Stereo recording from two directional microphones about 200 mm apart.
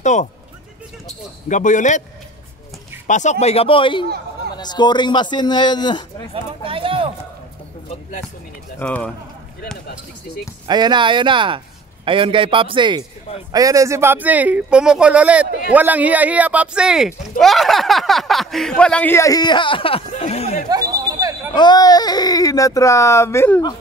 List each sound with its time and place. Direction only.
0.0 s speech: 35° left (ahead or behind)
1.5 s speech: 40° left (ahead or behind)
3.1 s a man's voice: 35° left (ahead or behind)
6.3 s a man's voice: 25° right (ahead or behind)
7.9 s speech: 40° left (ahead or behind)
8.7 s speech: 5° left (ahead or behind)
10.7 s a man's voice: 20° right (ahead or behind); by 20.6 s 30° left (ahead or behind)
20.7 s a sound: 15° right (ahead or behind)
21.5 s speech: 20° left (ahead or behind)